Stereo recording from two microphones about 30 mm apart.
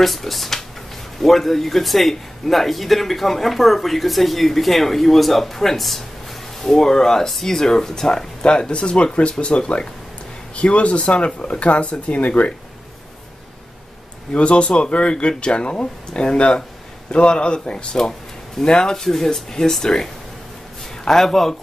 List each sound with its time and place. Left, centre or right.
0.0 s a man's voice: centre
6.6 s speech: centre
8.5 s speech: left
14.3 s speech: left
18.9 s speech: centre